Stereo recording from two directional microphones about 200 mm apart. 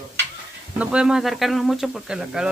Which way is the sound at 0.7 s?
5° right (ahead or behind).